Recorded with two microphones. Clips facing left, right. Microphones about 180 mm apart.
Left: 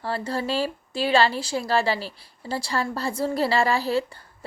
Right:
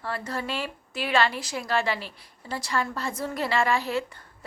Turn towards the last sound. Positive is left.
turn(degrees=35)  # may be behind; listen again after turning